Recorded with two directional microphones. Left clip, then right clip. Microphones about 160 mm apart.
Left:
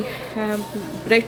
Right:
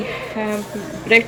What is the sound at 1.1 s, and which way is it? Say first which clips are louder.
Speech: right 4 dB; 20° left (ahead or behind).